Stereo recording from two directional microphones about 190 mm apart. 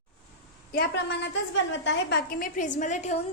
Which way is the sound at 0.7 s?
55° left (ahead or behind).